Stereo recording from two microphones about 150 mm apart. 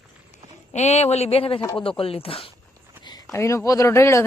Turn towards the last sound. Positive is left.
turn(degrees=20)  # may be behind; listen again after turning